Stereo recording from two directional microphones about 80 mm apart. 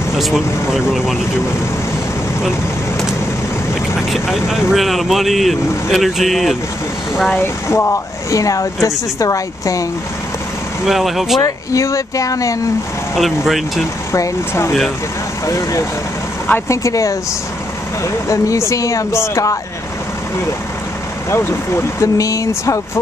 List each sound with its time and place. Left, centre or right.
0.2 s speech: centre
4.1 s speech: centre
7.3 s speech: left
10.9 s speech: centre
11.4 s speech: left
13.1 s speech: centre
14.1 s speech: left
21.3 s speech: left